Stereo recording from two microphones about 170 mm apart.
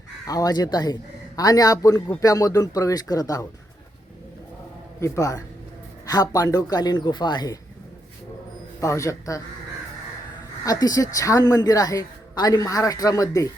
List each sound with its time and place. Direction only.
0.3 s speech: 20° left (ahead or behind)
4.9 s a man's voice: 15° left (ahead or behind)
8.8 s a man's voice: 20° left (ahead or behind)
10.7 s speech: 20° left (ahead or behind)